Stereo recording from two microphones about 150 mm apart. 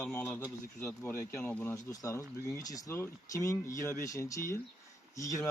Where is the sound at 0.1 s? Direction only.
15° left (ahead or behind).